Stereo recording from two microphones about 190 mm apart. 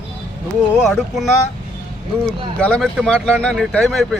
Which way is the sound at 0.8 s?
Centre (ahead or behind).